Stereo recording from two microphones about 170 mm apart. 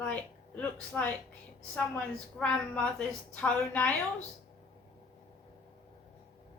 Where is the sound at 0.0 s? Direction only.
10° left (ahead or behind).